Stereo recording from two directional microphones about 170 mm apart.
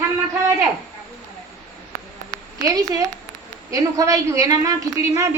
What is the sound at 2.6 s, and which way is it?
A woman's voice, 20° right (ahead or behind).